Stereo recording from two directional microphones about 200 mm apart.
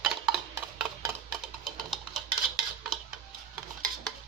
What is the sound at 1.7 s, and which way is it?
Music, centre (ahead or behind).